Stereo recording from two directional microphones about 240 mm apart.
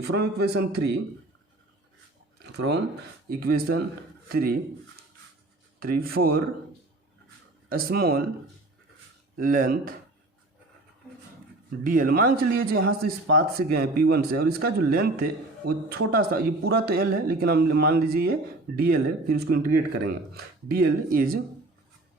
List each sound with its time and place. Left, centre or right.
0.1 s a man's voice: right
2.6 s a man's voice: right
5.8 s a man's voice: right
7.7 s a man's voice: right
9.3 s a man's voice: right
11.8 s a man's voice: right